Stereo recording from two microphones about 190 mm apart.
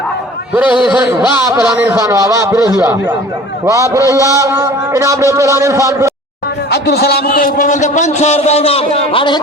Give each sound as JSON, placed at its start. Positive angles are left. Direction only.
{"t": 0.5, "sound": "a man's voice", "side_deg": -10}
{"t": 6.7, "sound": "a man's voice", "side_deg": 60}